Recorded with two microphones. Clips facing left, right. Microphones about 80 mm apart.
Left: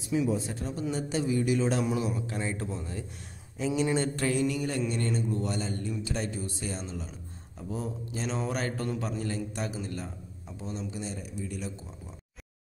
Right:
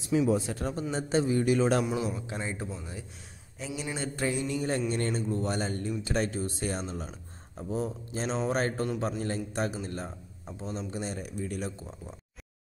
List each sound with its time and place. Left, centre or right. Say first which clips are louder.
0.3 s speech: right 3 dB; right
0.9 s a man's voice: right 3 dB; right
1.6 s speech: right 2 dB; right
2.1 s speech: left 2 dB; right; by 3.8 s centre
4.2 s a sound: left 2 dB; centre
4.6 s a man's voice: right 1 dB; right